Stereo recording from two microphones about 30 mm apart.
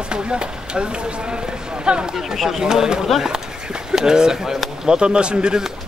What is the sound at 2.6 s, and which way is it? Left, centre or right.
A man's voice, right.